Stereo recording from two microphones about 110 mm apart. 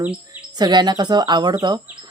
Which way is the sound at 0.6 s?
40° right (ahead or behind).